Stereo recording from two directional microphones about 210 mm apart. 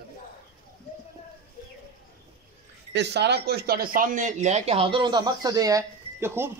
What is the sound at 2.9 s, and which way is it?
Speech, 55° right (ahead or behind).